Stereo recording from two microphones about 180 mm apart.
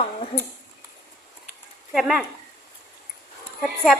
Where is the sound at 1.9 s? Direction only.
5° right (ahead or behind).